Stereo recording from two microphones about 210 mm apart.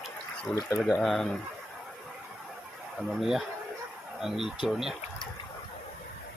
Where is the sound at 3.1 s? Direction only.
Centre (ahead or behind).